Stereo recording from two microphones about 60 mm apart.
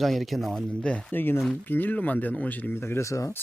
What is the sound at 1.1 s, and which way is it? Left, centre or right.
Speech, left.